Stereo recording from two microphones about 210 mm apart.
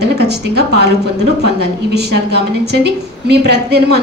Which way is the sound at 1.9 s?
50° right (ahead or behind).